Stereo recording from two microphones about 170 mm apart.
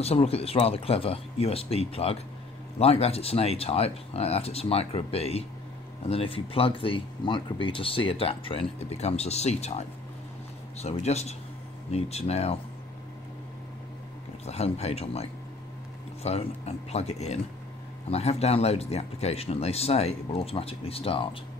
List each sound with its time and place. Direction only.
0.0 s speech: 35° left (ahead or behind)
14.4 s speech: 40° left (ahead or behind)